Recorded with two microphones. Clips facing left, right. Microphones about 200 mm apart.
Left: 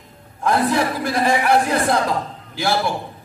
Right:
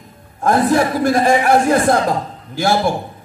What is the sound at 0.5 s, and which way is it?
A man's voice, 45° right (ahead or behind).